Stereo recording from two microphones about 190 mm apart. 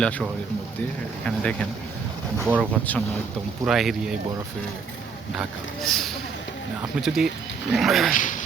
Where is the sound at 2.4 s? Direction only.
10° right (ahead or behind).